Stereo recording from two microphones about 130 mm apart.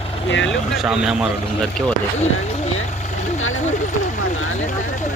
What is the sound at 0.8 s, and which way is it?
Speech, 5° right (ahead or behind).